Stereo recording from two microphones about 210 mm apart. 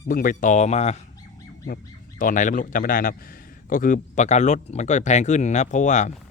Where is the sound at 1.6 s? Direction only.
40° left (ahead or behind).